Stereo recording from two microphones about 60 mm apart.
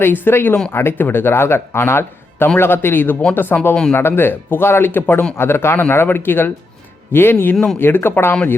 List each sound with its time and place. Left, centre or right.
0.0 s speech: left